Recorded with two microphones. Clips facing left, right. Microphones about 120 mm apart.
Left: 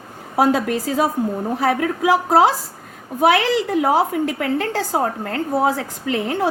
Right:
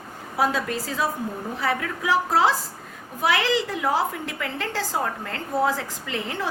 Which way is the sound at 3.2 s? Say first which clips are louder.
Left 6 dB; 55° left (ahead or behind).